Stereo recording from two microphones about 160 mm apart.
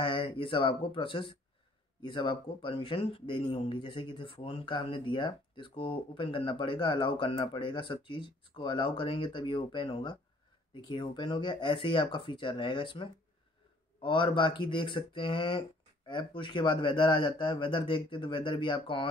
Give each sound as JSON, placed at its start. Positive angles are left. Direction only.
{"t": 0.0, "sound": "speech", "side_deg": 30}